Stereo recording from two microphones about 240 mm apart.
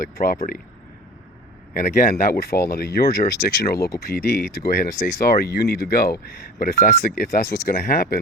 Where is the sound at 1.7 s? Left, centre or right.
Left.